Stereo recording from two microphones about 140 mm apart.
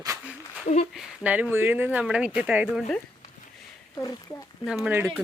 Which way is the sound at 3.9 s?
25° left (ahead or behind).